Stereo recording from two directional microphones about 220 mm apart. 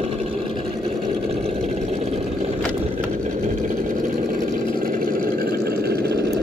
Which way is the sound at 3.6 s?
40° right (ahead or behind).